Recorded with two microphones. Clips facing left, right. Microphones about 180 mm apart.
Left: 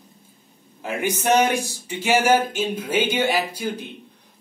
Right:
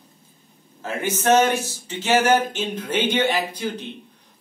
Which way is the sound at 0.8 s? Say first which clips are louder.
Left 1 dB; 15° left (ahead or behind).